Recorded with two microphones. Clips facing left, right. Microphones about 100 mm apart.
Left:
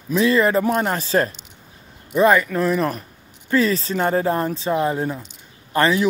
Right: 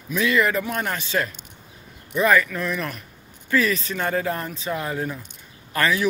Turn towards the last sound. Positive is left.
turn(degrees=30)  # may be behind; listen again after turning